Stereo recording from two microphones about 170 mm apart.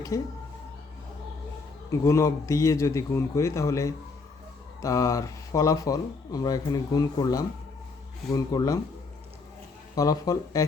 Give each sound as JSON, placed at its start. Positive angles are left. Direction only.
{"t": 0.1, "sound": "speech", "side_deg": 20}
{"t": 1.9, "sound": "a man's voice", "side_deg": 15}
{"t": 9.9, "sound": "speech", "side_deg": 20}